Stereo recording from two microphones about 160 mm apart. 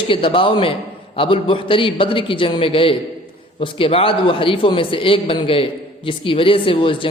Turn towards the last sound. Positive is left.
turn(degrees=35)  # may be behind; listen again after turning